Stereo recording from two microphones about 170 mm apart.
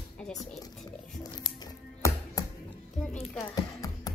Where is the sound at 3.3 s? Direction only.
20° left (ahead or behind).